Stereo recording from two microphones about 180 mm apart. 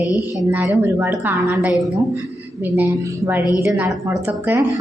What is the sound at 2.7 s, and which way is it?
A woman's voice, 10° right (ahead or behind).